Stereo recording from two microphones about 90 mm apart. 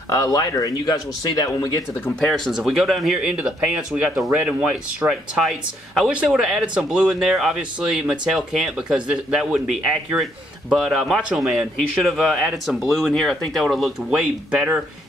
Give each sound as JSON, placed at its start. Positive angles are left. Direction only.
{"t": 0.1, "sound": "speech", "side_deg": 40}
{"t": 2.0, "sound": "speech", "side_deg": 5}
{"t": 14.5, "sound": "speech", "side_deg": -15}